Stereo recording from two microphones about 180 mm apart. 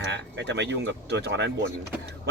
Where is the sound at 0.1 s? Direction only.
75° right (ahead or behind).